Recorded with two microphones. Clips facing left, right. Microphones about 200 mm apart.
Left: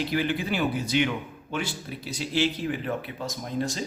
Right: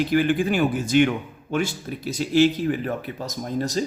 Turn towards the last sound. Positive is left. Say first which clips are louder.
# right 5 dB
turn(degrees=-40)  # may be behind; listen again after turning